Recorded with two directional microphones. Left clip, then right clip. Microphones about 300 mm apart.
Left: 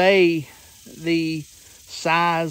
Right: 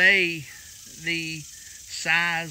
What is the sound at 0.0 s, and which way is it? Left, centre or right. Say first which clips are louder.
Speech: left 3 dB; centre.